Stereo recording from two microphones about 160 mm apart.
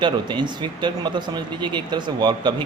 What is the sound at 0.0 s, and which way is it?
A man's voice, 30° right (ahead or behind).